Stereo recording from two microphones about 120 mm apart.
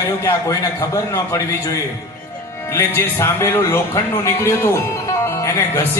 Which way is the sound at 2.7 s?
20° left (ahead or behind).